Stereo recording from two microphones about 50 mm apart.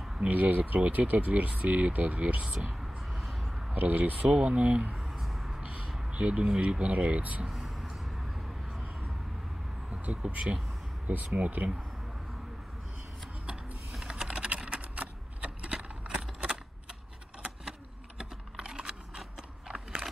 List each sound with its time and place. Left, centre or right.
0.2 s speech: right
2.8 s a sound: centre
3.7 s speech: right
4.9 s a sound: centre
5.5 s a sound: right
6.0 s speech: right
7.4 s vehicle: centre
10.0 s speech: right
11.1 s speech: right
14.0 s typing: centre
18.6 s a sound: centre
19.7 s biting: centre